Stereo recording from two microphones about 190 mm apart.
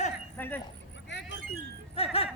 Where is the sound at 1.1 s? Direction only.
65° left (ahead or behind).